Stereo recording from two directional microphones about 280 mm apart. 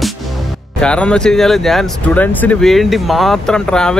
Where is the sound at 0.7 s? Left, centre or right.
Centre.